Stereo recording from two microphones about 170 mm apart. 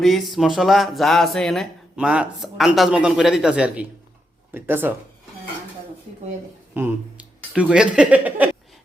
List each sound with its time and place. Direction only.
0.0 s speech: centre (ahead or behind)
6.8 s speech: 15° right (ahead or behind)